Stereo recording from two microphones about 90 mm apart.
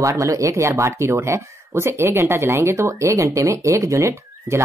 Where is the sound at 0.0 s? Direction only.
35° right (ahead or behind).